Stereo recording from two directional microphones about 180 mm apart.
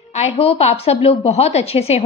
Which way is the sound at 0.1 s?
35° left (ahead or behind).